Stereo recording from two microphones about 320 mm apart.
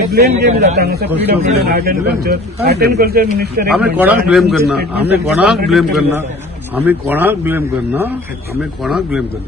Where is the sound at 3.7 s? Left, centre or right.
Centre.